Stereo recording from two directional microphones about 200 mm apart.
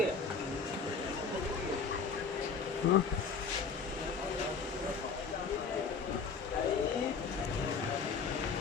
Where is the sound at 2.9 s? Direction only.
60° left (ahead or behind).